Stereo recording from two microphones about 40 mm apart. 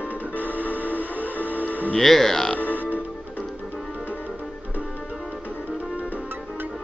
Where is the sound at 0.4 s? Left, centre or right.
Right.